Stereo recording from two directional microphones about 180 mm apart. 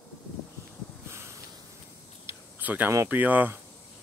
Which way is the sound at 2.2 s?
10° right (ahead or behind).